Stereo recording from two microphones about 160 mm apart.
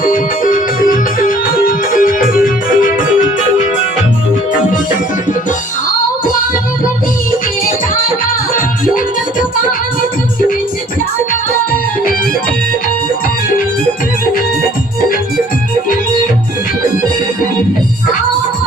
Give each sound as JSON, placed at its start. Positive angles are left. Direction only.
{"t": 0.0, "sound": "music", "side_deg": 55}